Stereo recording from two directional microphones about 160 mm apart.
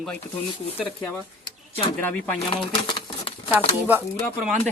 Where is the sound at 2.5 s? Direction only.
30° left (ahead or behind).